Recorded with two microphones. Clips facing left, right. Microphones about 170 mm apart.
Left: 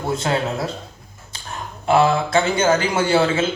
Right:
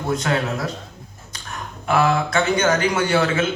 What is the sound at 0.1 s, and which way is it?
Speech, 25° left (ahead or behind).